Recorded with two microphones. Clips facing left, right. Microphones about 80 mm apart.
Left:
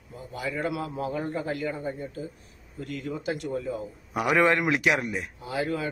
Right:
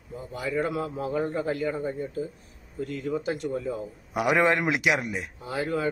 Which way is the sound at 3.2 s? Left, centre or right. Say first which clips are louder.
Right 1 dB; right.